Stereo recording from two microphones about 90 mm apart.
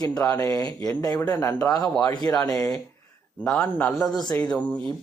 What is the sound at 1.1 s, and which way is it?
Speech, 25° left (ahead or behind).